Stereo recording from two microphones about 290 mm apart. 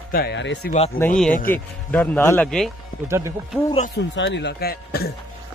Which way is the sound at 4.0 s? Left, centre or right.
Left.